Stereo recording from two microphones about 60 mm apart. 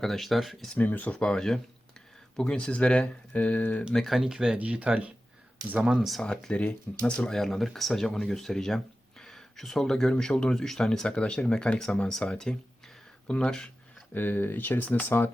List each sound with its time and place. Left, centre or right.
0.0 s speech: centre
0.7 s speech: left
1.1 s speech: centre
2.6 s speech: centre
3.9 s speech: centre
4.5 s speech: right
5.8 s speech: centre
6.2 s speech: centre
14.1 s speech: left